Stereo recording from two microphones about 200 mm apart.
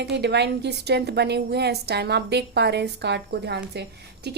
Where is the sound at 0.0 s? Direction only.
60° right (ahead or behind).